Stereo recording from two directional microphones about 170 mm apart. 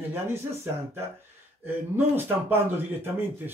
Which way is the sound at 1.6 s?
15° right (ahead or behind).